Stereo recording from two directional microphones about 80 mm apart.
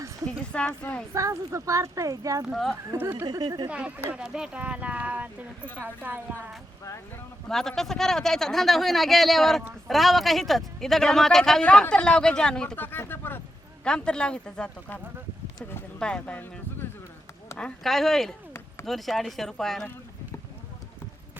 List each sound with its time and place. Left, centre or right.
0.5 s speech: centre
1.1 s speech: right
2.5 s a man's voice: centre
3.0 s speech: right
3.2 s speech: right
3.7 s speech: centre
7.4 s a man's voice: centre
12.7 s speech: left
13.8 s speech: centre
16.0 s speech: centre
17.6 s a man's voice: centre